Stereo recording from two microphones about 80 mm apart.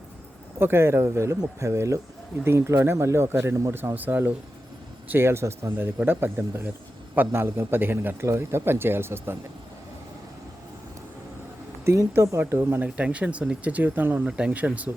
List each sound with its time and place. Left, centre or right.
0.6 s speech: right
3.8 s a man's voice: right
11.9 s a man's voice: right
12.8 s speech: centre